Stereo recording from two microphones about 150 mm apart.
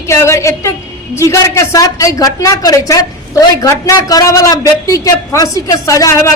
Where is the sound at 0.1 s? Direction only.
20° left (ahead or behind).